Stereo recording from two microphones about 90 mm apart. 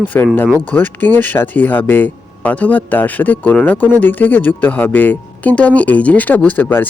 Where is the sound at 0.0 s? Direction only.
20° left (ahead or behind).